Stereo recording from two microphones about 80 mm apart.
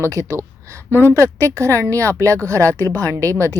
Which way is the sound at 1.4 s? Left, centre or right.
Right.